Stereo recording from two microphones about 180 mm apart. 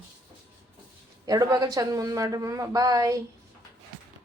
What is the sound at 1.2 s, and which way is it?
Speech, 20° right (ahead or behind).